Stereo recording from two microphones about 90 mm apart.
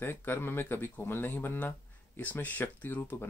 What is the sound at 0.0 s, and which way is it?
Speech, 25° left (ahead or behind).